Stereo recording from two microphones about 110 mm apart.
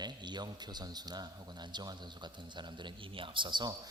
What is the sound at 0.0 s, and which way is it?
Speech, 40° right (ahead or behind).